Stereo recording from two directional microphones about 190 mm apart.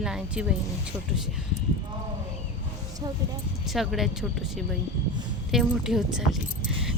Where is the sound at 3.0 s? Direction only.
20° right (ahead or behind).